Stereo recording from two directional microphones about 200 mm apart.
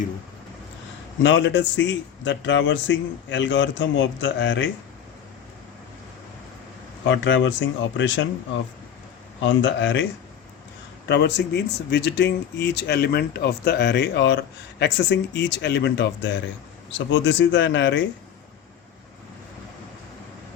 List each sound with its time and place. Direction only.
1.2 s speech: 65° left (ahead or behind)
7.1 s speech: 65° left (ahead or behind)
9.4 s speech: 65° left (ahead or behind)
11.1 s speech: 60° left (ahead or behind)